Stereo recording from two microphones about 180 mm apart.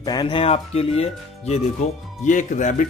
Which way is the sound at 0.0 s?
25° left (ahead or behind).